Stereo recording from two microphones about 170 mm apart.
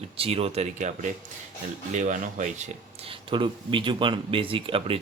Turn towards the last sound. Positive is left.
turn(degrees=-30)  # may be behind; listen again after turning